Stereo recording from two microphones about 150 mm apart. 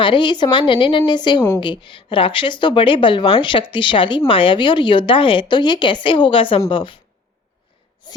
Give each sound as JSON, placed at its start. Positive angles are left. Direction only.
{"t": 0.0, "sound": "speech", "side_deg": 30}
{"t": 8.0, "sound": "sneeze", "side_deg": 30}